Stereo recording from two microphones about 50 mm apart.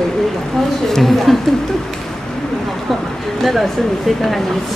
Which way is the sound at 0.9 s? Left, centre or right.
Centre.